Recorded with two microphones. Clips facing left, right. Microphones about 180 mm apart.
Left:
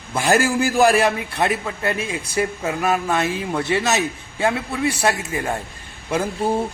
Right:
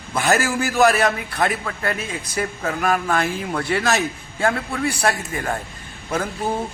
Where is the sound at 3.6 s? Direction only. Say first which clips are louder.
Even; 20° left (ahead or behind).